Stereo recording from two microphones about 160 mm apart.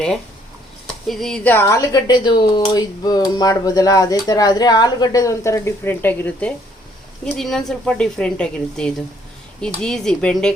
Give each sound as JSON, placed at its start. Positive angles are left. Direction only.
{"t": 1.0, "sound": "speech", "side_deg": 0}
{"t": 1.5, "sound": "speech", "side_deg": 20}